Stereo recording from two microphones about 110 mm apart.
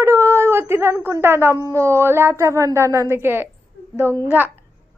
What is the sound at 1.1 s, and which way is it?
Speech, 20° right (ahead or behind).